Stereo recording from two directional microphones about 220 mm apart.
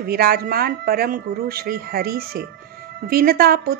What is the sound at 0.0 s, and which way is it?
A woman's voice, 45° right (ahead or behind).